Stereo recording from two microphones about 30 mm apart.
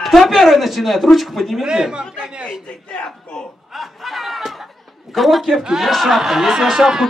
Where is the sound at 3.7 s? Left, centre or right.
Centre.